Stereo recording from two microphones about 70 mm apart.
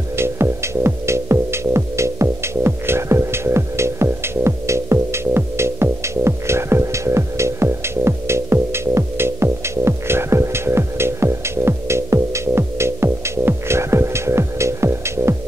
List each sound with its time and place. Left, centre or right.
0.1 s music: right